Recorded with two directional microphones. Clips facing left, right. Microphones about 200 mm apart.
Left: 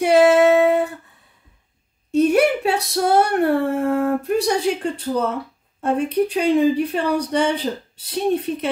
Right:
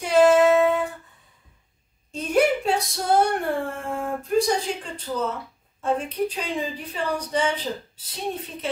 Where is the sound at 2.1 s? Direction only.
65° left (ahead or behind).